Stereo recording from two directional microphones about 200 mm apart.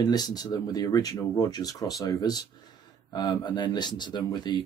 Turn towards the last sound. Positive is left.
turn(degrees=20)  # may be behind; listen again after turning